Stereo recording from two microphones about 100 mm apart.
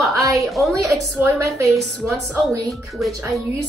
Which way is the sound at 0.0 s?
35° right (ahead or behind).